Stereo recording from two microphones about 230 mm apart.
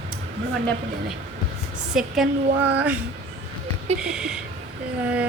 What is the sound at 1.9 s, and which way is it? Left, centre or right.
A woman's voice, centre.